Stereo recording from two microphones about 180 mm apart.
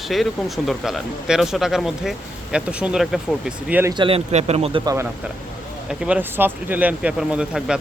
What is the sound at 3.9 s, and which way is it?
Speech, 30° right (ahead or behind).